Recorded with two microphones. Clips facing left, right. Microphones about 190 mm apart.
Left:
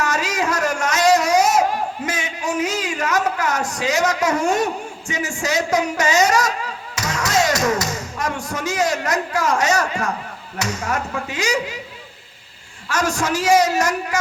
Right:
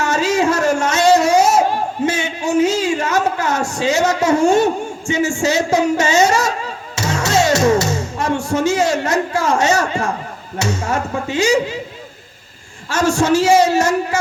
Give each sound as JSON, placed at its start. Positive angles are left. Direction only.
{"t": 0.0, "sound": "a sound", "side_deg": -25}
{"t": 10.6, "sound": "a man's voice", "side_deg": -25}
{"t": 12.9, "sound": "a man's voice", "side_deg": -25}